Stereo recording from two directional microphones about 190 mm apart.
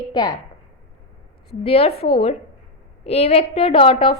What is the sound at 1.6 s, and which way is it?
A woman's voice, 30° left (ahead or behind).